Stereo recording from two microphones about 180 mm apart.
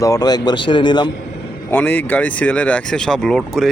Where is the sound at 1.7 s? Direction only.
10° left (ahead or behind).